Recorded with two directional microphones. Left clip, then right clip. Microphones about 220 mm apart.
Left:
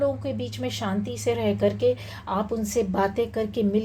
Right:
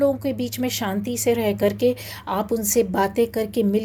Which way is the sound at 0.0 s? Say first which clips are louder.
Right 5 dB; 45° right (ahead or behind).